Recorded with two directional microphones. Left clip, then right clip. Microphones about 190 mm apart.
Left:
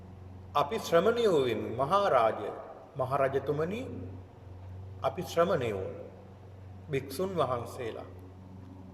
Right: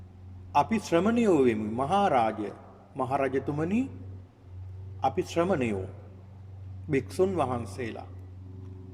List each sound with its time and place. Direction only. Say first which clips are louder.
0.5 s a man's voice: right 2 dB; 45° right (ahead or behind)
4.9 s a man's voice: right 1 dB; 45° right (ahead or behind)
6.9 s a man's voice: right 5 dB; 45° right (ahead or behind)